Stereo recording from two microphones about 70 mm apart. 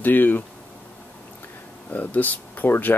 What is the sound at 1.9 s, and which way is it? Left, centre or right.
Speech, left.